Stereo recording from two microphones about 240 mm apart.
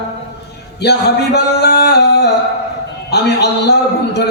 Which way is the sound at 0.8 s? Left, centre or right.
Left.